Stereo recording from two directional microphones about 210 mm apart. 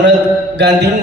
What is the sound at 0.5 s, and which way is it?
Mantra, 55° right (ahead or behind).